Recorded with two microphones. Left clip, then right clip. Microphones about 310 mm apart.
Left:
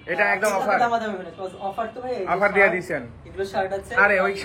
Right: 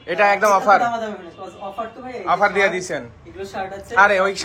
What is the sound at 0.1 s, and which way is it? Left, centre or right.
Speech, centre.